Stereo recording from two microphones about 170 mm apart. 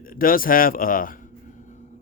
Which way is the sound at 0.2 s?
55° left (ahead or behind).